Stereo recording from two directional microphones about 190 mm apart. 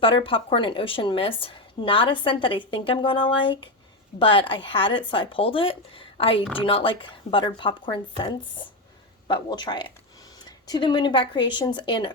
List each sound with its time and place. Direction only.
0.0 s a woman's voice: 30° left (ahead or behind)